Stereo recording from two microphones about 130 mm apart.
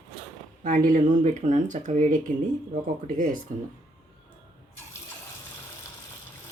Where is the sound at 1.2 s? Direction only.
75° right (ahead or behind).